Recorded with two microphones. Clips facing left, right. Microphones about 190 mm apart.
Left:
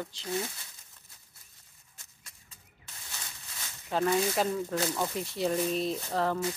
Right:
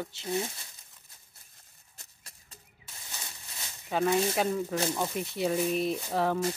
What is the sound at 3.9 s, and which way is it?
Speech, 5° right (ahead or behind).